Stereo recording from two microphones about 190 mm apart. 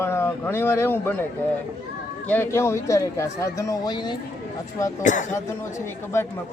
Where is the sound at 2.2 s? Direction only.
10° left (ahead or behind).